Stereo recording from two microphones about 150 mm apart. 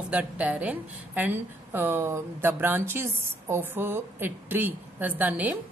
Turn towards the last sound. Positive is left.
turn(degrees=-10)  # may be behind; listen again after turning